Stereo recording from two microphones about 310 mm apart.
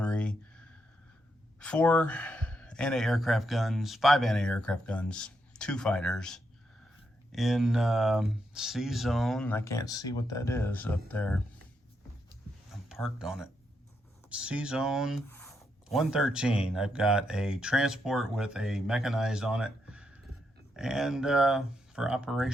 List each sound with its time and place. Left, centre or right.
0.0 s a sound: centre
1.5 s speech: centre
12.9 s speech: centre